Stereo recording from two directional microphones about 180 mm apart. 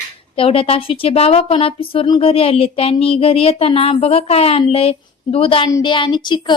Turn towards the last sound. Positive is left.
turn(degrees=25)  # may be behind; listen again after turning